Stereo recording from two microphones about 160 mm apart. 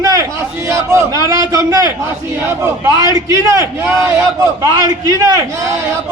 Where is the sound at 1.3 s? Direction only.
20° right (ahead or behind).